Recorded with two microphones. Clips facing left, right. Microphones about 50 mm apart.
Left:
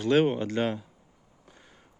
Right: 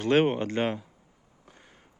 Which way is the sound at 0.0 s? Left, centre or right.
Right.